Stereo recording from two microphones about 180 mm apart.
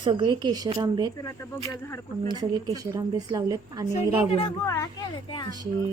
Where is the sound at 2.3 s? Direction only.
25° right (ahead or behind).